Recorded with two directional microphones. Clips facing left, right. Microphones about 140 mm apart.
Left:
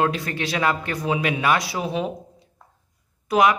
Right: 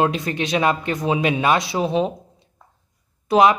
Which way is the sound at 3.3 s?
25° right (ahead or behind).